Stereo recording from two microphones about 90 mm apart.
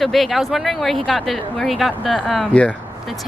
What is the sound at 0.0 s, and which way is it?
Speech, centre (ahead or behind).